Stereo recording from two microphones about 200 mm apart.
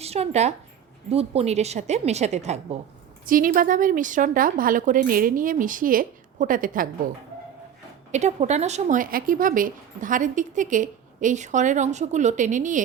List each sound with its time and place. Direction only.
0.0 s a woman's voice: 30° right (ahead or behind)
8.1 s speech: 35° right (ahead or behind)